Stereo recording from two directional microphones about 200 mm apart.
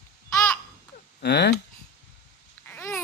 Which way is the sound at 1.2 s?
55° left (ahead or behind).